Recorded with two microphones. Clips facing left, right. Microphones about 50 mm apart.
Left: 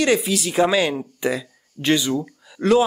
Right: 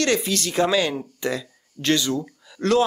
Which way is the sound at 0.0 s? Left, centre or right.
Centre.